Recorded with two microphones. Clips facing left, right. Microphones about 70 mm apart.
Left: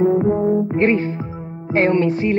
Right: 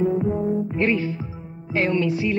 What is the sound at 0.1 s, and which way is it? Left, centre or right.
Music, centre.